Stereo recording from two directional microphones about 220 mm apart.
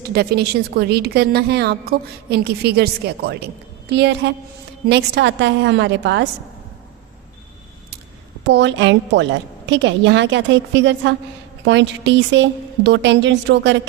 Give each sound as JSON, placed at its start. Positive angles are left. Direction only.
{"t": 0.1, "sound": "a woman's voice", "side_deg": -45}
{"t": 8.4, "sound": "a woman's voice", "side_deg": -55}